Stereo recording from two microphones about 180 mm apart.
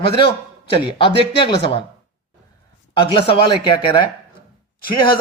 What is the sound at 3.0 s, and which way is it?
Speech, 30° left (ahead or behind).